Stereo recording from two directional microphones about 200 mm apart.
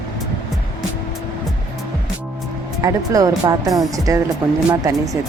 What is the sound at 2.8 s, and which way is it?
Speech, 15° right (ahead or behind).